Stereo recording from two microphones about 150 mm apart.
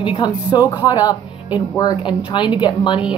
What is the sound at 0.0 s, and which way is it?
Speech, 30° left (ahead or behind).